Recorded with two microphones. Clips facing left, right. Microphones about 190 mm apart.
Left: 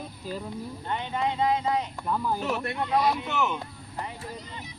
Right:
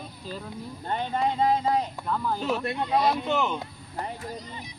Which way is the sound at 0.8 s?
40° right (ahead or behind).